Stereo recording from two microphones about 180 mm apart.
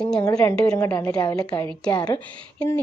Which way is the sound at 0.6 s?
20° left (ahead or behind).